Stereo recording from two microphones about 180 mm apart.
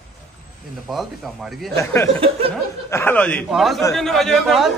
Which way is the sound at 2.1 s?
30° right (ahead or behind).